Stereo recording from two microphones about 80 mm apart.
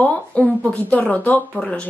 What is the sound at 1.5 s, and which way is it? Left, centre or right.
Speech, centre.